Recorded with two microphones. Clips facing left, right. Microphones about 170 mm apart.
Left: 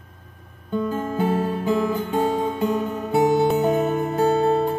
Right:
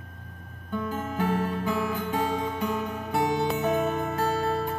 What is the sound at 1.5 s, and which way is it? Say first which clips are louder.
Music: left 6 dB; 15° left (ahead or behind).